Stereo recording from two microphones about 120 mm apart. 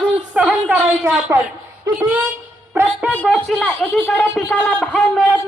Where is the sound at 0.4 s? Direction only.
10° right (ahead or behind).